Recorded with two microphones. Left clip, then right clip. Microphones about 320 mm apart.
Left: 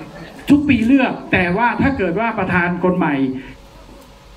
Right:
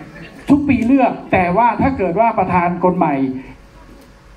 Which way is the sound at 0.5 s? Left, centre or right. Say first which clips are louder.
Even; centre.